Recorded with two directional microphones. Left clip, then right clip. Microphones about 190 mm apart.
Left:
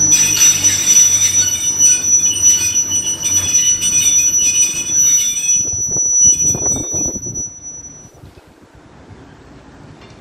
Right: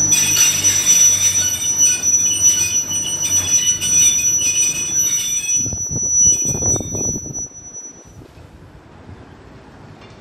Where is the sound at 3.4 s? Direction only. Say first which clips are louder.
Left 3 dB; 50° right (ahead or behind).